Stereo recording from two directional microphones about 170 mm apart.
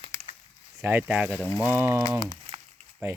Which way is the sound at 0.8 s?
10° right (ahead or behind).